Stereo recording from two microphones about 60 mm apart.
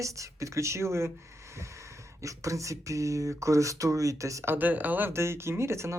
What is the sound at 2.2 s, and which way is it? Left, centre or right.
Speech, right.